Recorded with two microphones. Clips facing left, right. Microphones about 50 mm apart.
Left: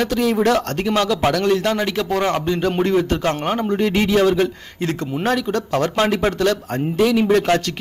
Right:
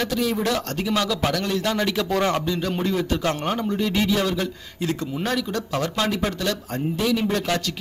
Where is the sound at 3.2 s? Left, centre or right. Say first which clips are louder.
Left 4 dB; left.